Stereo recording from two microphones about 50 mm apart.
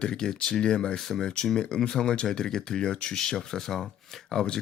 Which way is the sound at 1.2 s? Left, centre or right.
Centre.